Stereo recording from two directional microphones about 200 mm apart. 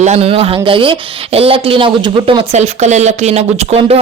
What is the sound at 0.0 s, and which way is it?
Speech, 30° right (ahead or behind).